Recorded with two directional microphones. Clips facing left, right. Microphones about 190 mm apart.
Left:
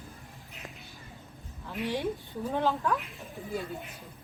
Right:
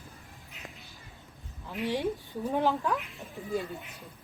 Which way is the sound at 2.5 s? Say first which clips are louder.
Right 1 dB; 15° right (ahead or behind).